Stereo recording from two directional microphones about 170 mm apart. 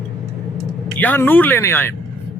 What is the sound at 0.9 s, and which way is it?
Speech, 10° left (ahead or behind).